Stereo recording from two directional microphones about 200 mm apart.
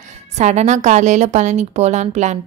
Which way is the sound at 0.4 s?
35° right (ahead or behind).